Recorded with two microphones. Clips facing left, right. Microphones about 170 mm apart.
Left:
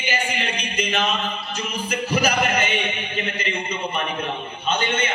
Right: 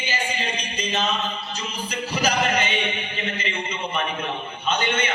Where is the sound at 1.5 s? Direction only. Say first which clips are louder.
Left 3 dB; 55° left (ahead or behind).